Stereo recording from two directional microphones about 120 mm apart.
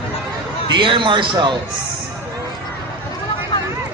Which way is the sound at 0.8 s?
45° right (ahead or behind).